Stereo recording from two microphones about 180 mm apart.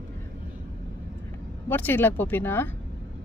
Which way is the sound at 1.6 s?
10° left (ahead or behind).